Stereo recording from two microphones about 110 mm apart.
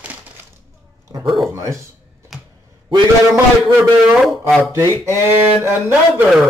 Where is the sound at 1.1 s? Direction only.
35° right (ahead or behind).